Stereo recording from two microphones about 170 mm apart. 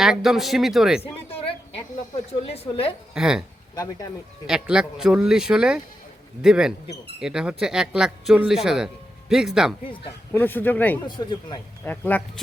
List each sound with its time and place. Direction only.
0.0 s speech: centre (ahead or behind)
2.5 s a woman's voice: 35° left (ahead or behind)
3.2 s speech: 5° right (ahead or behind)
4.4 s speech: 5° right (ahead or behind)
10.3 s speech: 10° left (ahead or behind)
11.0 s speech: 25° left (ahead or behind)
11.9 s speech: 10° left (ahead or behind)